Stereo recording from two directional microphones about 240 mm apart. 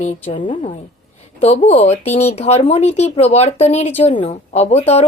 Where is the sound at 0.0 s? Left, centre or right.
Left.